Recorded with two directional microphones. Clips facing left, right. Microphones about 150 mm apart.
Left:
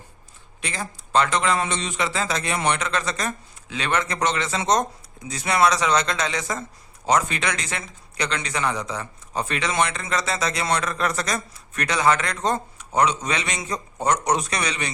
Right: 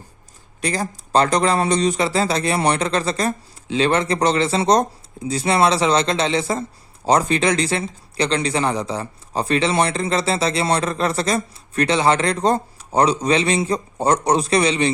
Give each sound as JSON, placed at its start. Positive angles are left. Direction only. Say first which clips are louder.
{"t": 0.6, "sound": "speech", "louder": "right 8 dB", "side_deg": -40}